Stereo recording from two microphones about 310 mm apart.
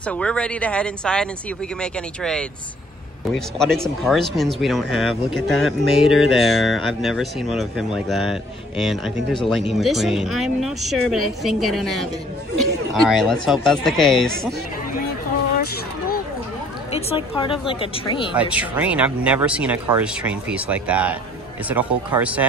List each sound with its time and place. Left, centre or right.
0.0 s speech: centre
16.9 s speech: centre
18.3 s speech: centre